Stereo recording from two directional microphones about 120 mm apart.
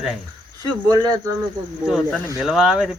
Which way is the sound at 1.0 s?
30° right (ahead or behind).